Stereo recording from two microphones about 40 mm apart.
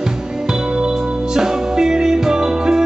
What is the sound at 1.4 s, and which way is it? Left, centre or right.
Music, centre.